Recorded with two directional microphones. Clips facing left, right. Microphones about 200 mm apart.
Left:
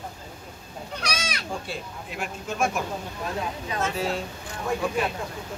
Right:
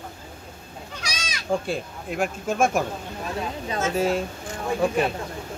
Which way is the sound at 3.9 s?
45° right (ahead or behind).